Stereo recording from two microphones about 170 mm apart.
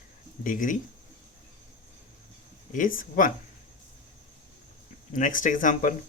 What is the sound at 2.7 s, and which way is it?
Speech, 50° left (ahead or behind).